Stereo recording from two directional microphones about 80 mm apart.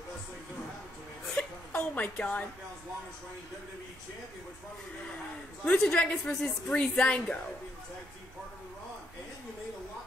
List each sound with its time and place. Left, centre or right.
1.3 s hiccup: centre
5.7 s a woman's voice: centre